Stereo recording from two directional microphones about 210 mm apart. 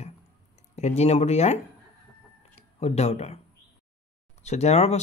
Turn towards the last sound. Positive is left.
turn(degrees=30)  # may be behind; listen again after turning